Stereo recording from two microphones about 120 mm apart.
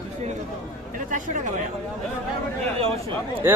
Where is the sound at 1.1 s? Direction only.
90° right.